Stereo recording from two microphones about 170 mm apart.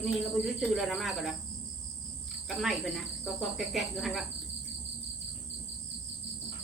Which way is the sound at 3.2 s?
Centre (ahead or behind).